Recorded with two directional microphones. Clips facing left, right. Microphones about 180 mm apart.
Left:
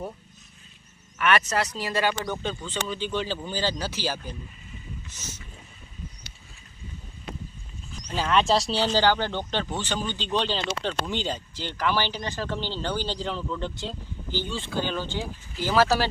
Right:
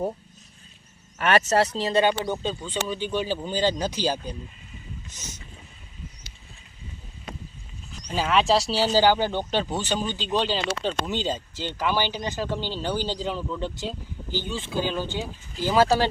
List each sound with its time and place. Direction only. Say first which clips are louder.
1.2 s speech: right 3 dB; 30° right (ahead or behind)
8.0 s speech: right 1 dB; 10° right (ahead or behind)